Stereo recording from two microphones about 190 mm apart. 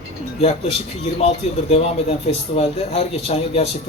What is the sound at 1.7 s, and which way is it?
A man's voice, 30° left (ahead or behind).